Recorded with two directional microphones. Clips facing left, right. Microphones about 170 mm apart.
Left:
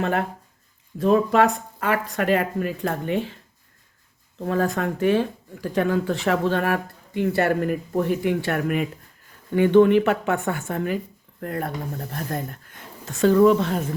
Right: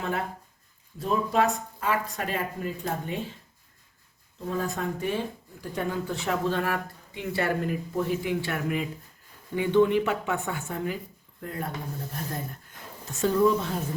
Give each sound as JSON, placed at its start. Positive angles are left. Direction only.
{"t": 0.0, "sound": "speech", "side_deg": 70}
{"t": 4.4, "sound": "speech", "side_deg": 75}
{"t": 13.1, "sound": "speech", "side_deg": 85}